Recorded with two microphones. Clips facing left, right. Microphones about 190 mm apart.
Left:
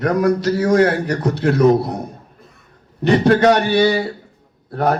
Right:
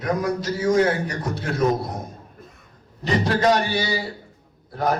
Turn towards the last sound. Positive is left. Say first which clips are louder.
# left 5 dB
turn(degrees=60)  # may be behind; listen again after turning